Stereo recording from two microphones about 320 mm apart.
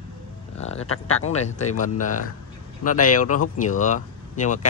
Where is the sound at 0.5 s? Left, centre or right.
Centre.